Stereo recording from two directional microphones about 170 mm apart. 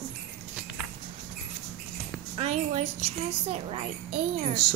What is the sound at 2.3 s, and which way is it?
Speech, 40° right (ahead or behind).